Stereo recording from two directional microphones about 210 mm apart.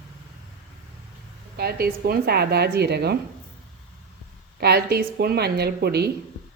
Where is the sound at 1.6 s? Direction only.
45° right (ahead or behind).